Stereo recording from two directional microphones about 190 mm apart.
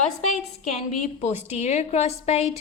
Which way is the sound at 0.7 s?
35° left (ahead or behind).